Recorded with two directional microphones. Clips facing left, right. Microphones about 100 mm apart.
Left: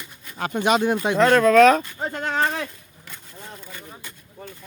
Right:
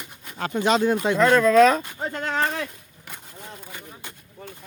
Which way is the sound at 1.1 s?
70° left (ahead or behind).